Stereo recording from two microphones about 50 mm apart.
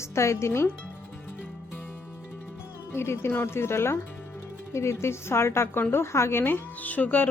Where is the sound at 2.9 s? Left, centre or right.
Left.